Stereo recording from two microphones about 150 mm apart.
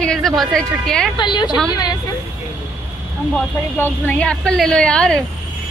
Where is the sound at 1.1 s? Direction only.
30° left (ahead or behind).